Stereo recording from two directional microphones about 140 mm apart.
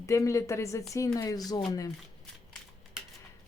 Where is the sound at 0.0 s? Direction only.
20° left (ahead or behind).